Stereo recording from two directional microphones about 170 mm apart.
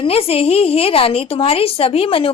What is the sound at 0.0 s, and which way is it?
A woman's voice, 35° left (ahead or behind).